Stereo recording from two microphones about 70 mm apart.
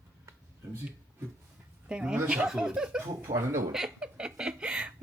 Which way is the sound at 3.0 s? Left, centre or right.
Right.